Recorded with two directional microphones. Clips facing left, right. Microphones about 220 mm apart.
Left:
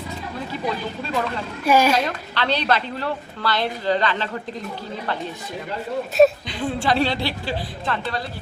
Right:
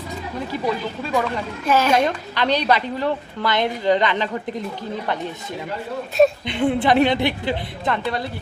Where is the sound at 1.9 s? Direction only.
15° right (ahead or behind).